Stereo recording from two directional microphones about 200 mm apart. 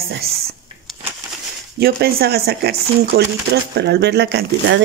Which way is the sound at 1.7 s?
50° right (ahead or behind).